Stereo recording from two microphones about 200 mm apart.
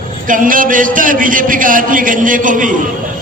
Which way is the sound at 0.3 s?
40° right (ahead or behind).